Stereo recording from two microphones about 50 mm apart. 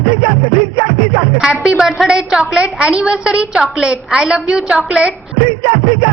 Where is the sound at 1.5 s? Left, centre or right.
Centre.